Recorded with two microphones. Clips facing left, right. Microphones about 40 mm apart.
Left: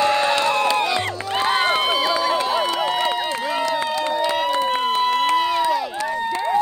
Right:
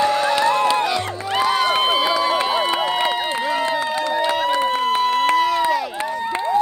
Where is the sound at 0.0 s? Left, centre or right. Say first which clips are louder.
Even; left.